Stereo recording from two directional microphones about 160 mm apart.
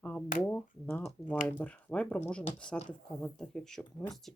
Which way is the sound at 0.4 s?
10° left (ahead or behind).